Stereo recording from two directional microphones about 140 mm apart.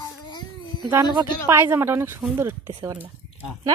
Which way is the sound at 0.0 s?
30° left (ahead or behind).